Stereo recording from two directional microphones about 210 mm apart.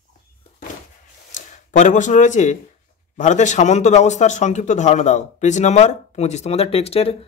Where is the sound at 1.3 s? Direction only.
35° left (ahead or behind).